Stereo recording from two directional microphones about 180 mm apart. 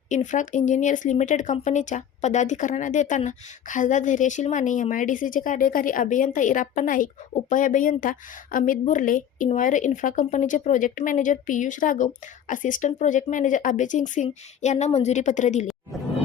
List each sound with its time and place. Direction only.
0.3 s speech: 45° left (ahead or behind)
15.6 s roaring cats: centre (ahead or behind)